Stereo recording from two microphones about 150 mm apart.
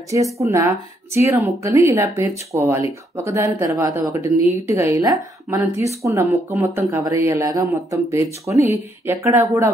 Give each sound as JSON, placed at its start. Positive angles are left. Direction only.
{"t": 0.4, "sound": "a woman's voice", "side_deg": -20}